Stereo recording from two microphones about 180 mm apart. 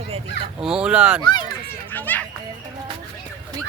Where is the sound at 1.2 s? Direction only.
25° left (ahead or behind).